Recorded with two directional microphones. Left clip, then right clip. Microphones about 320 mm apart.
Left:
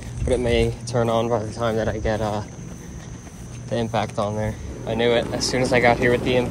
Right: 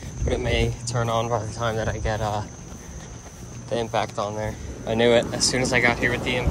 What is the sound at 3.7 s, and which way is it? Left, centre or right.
Speech, centre.